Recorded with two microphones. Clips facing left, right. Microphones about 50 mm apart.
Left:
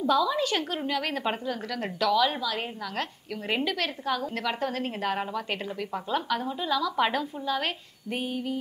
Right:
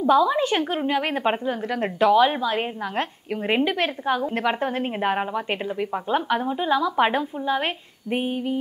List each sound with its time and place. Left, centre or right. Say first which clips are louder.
0.0 s a woman's voice: right 6 dB; right